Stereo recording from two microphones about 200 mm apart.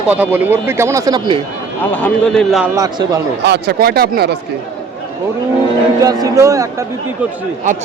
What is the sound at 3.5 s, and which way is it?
Speech, 55° right (ahead or behind).